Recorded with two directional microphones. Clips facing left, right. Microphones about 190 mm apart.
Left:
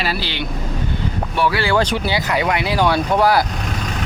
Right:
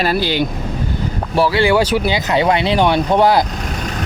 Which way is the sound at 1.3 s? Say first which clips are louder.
Right 4 dB; 35° right (ahead or behind).